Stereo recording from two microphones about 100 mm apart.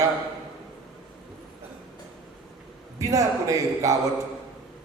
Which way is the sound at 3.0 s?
35° right (ahead or behind).